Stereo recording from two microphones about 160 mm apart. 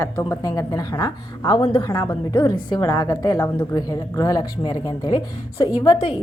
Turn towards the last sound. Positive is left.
turn(degrees=25)  # may be behind; listen again after turning